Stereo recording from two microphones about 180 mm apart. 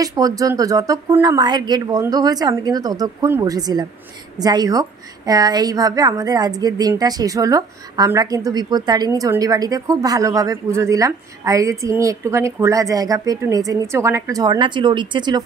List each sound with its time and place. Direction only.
0.0 s a woman's voice: 20° right (ahead or behind)